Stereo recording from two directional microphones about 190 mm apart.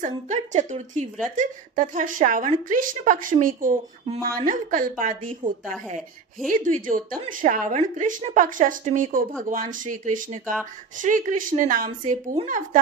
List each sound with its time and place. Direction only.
0.0 s a woman's voice: 40° right (ahead or behind)